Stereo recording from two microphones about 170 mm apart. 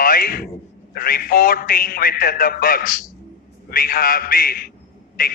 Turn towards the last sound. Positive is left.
turn(degrees=55)  # may be behind; listen again after turning